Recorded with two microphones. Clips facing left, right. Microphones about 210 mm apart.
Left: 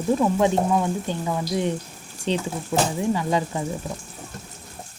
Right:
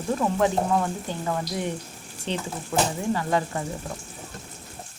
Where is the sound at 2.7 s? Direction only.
20° left (ahead or behind).